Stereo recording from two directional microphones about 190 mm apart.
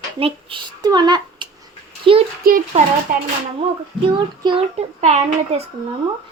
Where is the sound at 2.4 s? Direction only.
50° right (ahead or behind).